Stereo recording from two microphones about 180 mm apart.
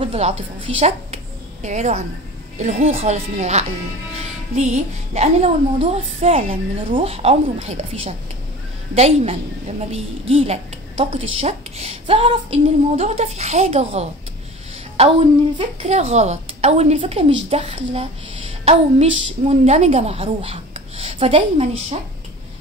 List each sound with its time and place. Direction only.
0.0 s a woman's voice: 35° right (ahead or behind)
0.7 s a sound: 35° right (ahead or behind)
3.0 s a woman's voice: 40° right (ahead or behind)